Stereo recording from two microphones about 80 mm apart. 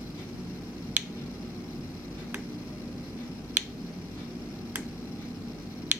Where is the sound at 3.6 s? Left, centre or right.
Centre.